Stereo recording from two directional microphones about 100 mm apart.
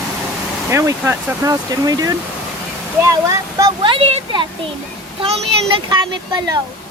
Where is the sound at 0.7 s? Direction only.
30° right (ahead or behind).